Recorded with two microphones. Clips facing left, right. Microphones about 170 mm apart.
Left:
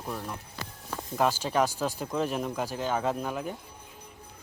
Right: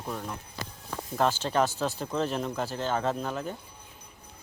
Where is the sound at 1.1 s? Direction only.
10° left (ahead or behind).